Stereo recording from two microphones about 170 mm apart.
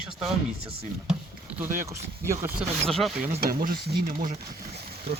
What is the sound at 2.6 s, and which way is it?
Speech, centre (ahead or behind).